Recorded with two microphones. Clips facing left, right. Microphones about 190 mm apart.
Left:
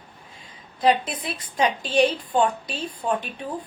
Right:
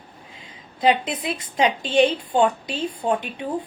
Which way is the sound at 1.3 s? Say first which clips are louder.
Right 2 dB; 25° right (ahead or behind).